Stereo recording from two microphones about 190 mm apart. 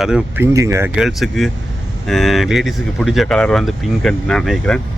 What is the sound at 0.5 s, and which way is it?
Speech, 15° right (ahead or behind).